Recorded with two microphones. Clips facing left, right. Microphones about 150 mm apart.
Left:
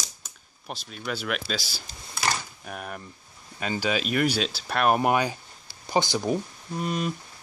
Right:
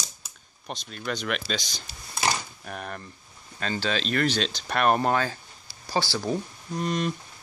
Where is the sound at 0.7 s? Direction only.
5° left (ahead or behind).